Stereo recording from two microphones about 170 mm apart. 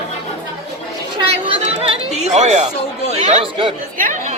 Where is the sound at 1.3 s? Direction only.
35° right (ahead or behind).